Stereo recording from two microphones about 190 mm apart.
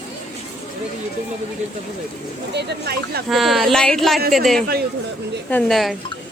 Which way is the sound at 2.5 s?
60° right (ahead or behind).